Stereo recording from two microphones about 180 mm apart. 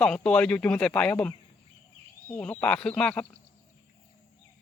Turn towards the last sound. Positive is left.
turn(degrees=5)  # may be behind; listen again after turning